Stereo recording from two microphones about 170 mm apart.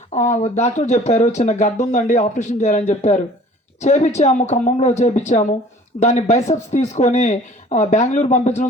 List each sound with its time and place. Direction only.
0.1 s speech: 45° left (ahead or behind)